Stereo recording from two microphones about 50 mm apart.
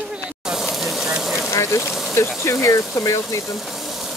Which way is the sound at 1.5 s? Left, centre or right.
Left.